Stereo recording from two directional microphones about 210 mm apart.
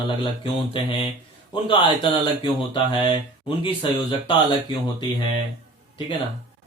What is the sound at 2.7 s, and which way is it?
Speech, 25° left (ahead or behind).